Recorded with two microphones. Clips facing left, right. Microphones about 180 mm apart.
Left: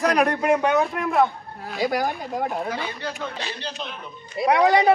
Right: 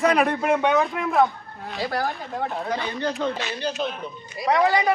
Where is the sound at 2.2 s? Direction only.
Centre (ahead or behind).